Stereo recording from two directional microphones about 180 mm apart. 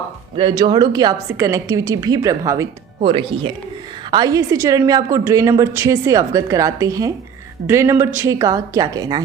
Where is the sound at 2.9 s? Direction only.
30° right (ahead or behind).